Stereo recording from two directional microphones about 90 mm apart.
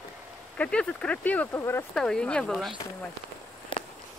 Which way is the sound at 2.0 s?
5° left (ahead or behind).